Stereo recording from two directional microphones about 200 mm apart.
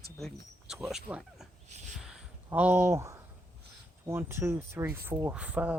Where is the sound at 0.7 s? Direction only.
Centre (ahead or behind).